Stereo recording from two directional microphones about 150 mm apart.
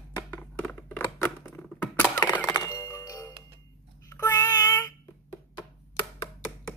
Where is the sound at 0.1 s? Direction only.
10° left (ahead or behind).